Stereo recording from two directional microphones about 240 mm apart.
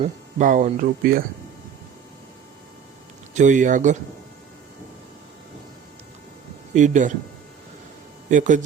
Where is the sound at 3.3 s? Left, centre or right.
Right.